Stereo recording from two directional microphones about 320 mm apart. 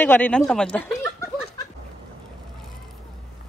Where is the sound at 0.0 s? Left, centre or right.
Centre.